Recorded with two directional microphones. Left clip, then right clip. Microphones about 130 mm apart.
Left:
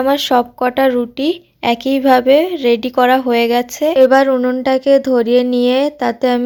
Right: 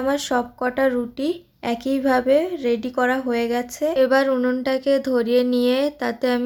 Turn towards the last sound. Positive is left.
turn(degrees=35)  # may be behind; listen again after turning